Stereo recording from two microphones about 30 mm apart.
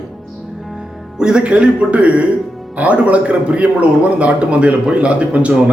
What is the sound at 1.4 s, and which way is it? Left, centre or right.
A man's voice, right.